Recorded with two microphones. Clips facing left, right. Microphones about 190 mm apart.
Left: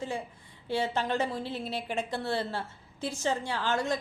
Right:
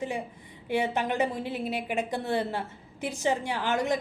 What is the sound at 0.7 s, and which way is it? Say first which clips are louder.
A woman's voice: right 2 dB; 15° right (ahead or behind).